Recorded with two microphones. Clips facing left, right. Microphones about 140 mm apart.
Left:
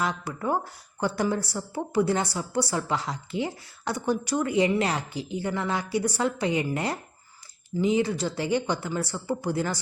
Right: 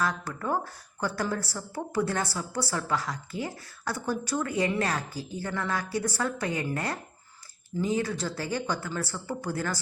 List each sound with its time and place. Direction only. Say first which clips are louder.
0.0 s a woman's voice: left 2 dB; 15° left (ahead or behind)